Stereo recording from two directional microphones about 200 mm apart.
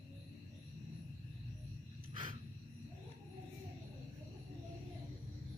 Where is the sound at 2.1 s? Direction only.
25° right (ahead or behind).